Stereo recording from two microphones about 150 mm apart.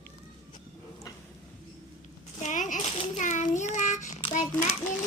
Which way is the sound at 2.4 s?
55° left (ahead or behind).